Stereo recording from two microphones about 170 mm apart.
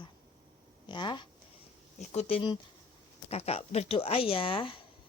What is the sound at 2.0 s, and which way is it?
Speech, 40° left (ahead or behind).